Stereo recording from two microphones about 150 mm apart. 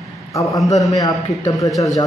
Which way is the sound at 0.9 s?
25° left (ahead or behind).